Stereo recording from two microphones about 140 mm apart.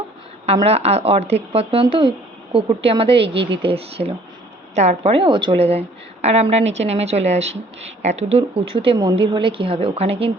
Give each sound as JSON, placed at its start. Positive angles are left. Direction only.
{"t": 0.4, "sound": "a woman's voice", "side_deg": -45}